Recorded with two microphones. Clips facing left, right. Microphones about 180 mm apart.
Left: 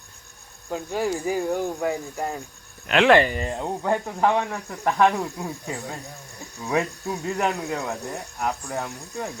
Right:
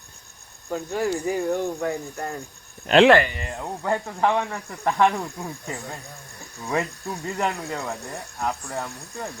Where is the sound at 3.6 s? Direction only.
10° left (ahead or behind).